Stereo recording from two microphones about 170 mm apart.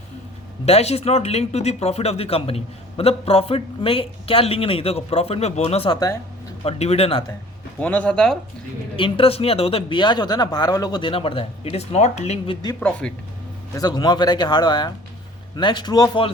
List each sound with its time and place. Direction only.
0.6 s speech: 40° left (ahead or behind)
7.8 s speech: 10° left (ahead or behind)
9.0 s speech: 30° left (ahead or behind)
12.8 s speech: 5° left (ahead or behind)
13.7 s speech: 25° left (ahead or behind)